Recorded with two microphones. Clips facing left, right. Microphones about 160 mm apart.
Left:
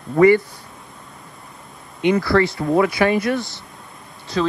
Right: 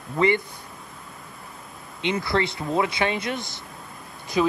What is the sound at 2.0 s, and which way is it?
A man's voice, 20° right (ahead or behind).